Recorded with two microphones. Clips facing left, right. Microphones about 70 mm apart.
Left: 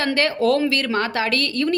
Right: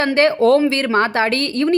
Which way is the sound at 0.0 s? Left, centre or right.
Right.